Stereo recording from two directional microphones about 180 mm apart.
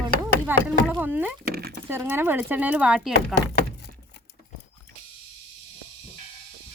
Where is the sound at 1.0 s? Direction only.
10° right (ahead or behind).